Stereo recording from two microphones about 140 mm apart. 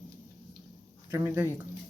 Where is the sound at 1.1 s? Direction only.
20° right (ahead or behind).